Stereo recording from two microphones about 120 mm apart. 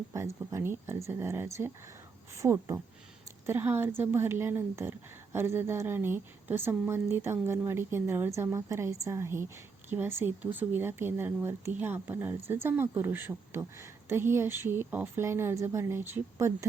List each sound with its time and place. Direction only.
0.1 s speech: 25° right (ahead or behind)